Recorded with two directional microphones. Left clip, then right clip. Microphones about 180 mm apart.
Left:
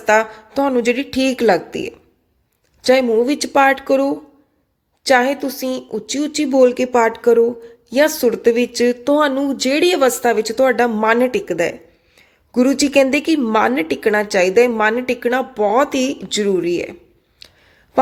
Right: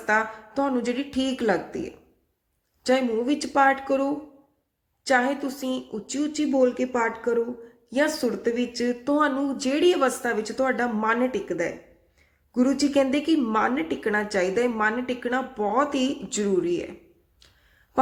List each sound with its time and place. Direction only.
0.0 s speech: 40° left (ahead or behind)